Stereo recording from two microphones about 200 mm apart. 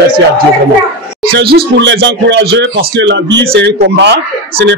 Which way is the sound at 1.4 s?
55° right (ahead or behind).